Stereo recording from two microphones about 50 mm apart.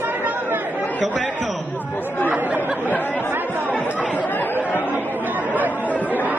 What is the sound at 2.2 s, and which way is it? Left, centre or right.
Chatter, right.